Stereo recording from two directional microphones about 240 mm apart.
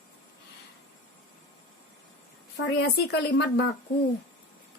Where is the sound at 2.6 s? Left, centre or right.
Left.